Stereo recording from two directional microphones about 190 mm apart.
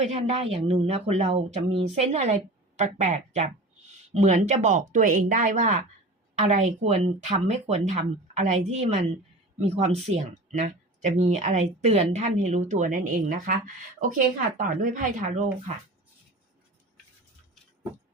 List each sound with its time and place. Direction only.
0.0 s speech: 35° right (ahead or behind)
14.7 s speech: 45° right (ahead or behind)